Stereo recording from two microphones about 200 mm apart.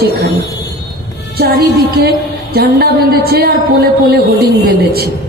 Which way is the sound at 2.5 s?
50° right (ahead or behind).